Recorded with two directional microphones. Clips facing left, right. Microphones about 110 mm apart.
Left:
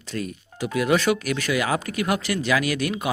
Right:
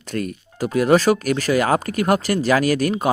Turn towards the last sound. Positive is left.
turn(degrees=-40)  # may be behind; listen again after turning